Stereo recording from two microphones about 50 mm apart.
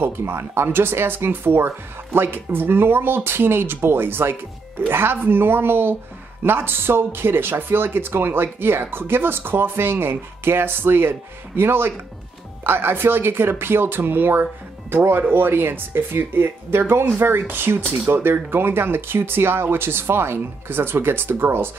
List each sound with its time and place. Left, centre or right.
0.0 s speech: right